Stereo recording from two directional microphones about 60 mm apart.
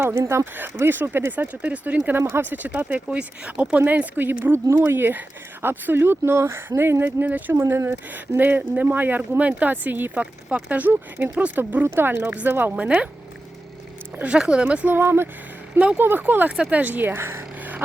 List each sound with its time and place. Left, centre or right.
0.0 s speech: right
0.5 s speech: right
1.6 s speech: right
2.0 s speech: right
12.8 s speech: right
14.2 s speech: centre
14.9 s speech: right
17.2 s speech: right
17.6 s a sound: right